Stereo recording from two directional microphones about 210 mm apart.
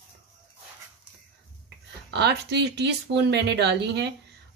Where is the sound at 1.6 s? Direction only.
50° right (ahead or behind).